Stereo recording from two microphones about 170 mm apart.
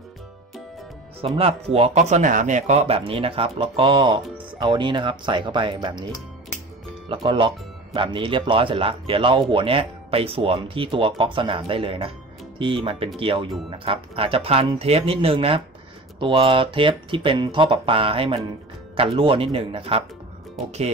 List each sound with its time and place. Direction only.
1.2 s speech: 35° right (ahead or behind)
7.1 s speech: 30° right (ahead or behind)